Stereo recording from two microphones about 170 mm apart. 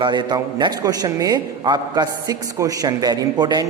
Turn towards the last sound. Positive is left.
turn(degrees=-25)  # may be behind; listen again after turning